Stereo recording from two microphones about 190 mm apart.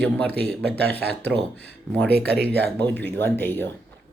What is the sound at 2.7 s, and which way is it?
Speech, 10° left (ahead or behind).